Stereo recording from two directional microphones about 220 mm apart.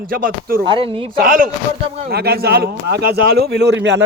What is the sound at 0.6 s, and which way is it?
Speech, 25° right (ahead or behind).